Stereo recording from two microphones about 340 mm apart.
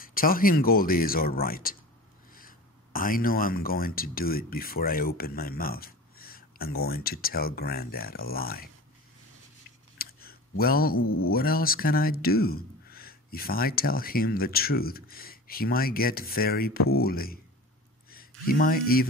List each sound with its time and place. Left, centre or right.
0.0 s speech: left
10.0 s a sound: left
10.6 s speech: left
11.0 s speech: left
11.4 s speech: left